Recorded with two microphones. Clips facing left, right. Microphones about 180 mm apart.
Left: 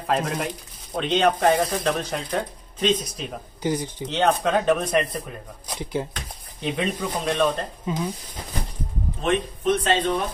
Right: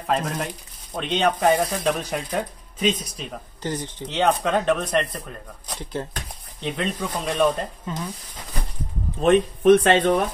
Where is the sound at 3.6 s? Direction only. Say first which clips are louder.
Left 4 dB; 10° left (ahead or behind).